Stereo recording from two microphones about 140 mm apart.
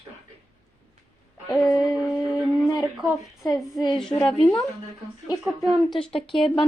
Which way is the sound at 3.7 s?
30° left (ahead or behind).